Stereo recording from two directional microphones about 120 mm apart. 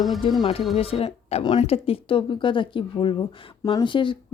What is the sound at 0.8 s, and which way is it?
Speech, 55° left (ahead or behind).